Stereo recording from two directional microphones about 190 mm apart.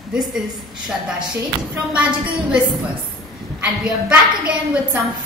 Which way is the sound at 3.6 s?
5° right (ahead or behind).